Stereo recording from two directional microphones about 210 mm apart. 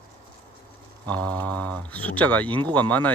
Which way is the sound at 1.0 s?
5° left (ahead or behind).